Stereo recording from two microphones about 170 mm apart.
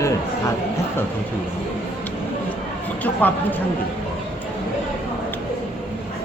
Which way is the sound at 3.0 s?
10° left (ahead or behind).